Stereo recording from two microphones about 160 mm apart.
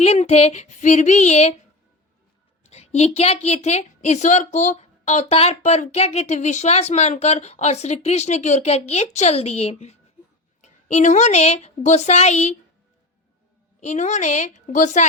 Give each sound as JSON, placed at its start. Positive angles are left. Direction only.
{"t": 0.0, "sound": "a woman's voice", "side_deg": 40}
{"t": 2.6, "sound": "a woman's voice", "side_deg": 40}
{"t": 13.8, "sound": "a woman's voice", "side_deg": 50}